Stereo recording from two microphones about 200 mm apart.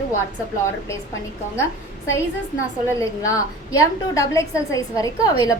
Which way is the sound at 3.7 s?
15° left (ahead or behind).